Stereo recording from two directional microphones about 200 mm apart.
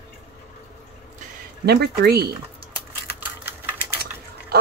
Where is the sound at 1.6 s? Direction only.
55° right (ahead or behind).